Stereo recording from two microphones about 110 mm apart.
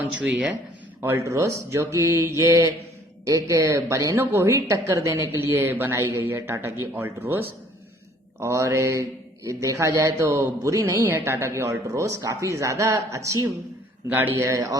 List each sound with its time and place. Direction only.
0.0 s speech: 10° right (ahead or behind)
1.0 s speech: 25° right (ahead or behind)
8.4 s speech: 25° right (ahead or behind)